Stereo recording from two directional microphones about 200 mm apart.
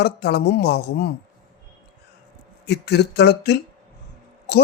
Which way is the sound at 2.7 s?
55° left (ahead or behind).